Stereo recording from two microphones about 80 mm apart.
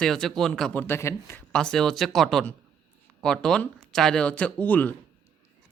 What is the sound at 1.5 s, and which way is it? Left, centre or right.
Speech, centre.